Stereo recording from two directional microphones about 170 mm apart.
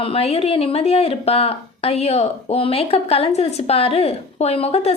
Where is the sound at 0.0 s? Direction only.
35° left (ahead or behind).